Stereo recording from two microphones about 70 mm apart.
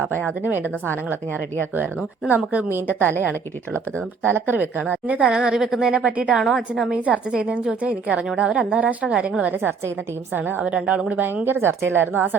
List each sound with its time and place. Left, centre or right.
0.1 s a woman's voice: centre
0.4 s a woman's voice: right
4.2 s a woman's voice: right
5.3 s a woman's voice: centre
6.0 s a woman's voice: centre
6.4 s a woman's voice: centre
7.3 s a woman's voice: centre
9.6 s speech: right
10.3 s a woman's voice: right